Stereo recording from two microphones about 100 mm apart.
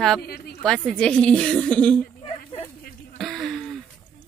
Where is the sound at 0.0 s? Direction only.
5° left (ahead or behind).